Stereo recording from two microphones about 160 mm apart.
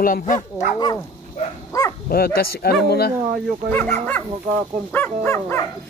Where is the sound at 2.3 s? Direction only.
80° left.